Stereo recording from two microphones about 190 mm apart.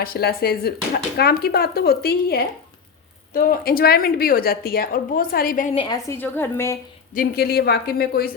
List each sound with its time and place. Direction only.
0.0 s a woman's voice: 55° left (ahead or behind)
5.7 s a woman's voice: 25° left (ahead or behind)
6.1 s a woman's voice: 10° left (ahead or behind)
7.1 s speech: 50° left (ahead or behind)